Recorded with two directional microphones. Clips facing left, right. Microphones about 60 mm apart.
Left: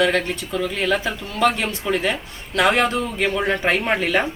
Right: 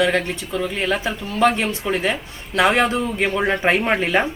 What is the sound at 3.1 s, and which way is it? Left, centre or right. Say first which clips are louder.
Speech: right 1 dB; centre.